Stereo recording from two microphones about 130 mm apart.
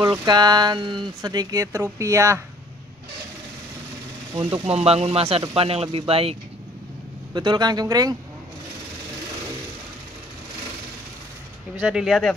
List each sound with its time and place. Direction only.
0.0 s speech: 30° right (ahead or behind)
4.4 s speech: 45° right (ahead or behind)
7.3 s speech: 35° right (ahead or behind)
11.7 s speech: 5° right (ahead or behind)